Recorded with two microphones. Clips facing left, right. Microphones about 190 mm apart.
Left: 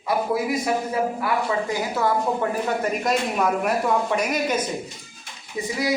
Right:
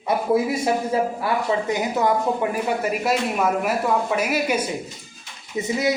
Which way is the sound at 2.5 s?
10° right (ahead or behind).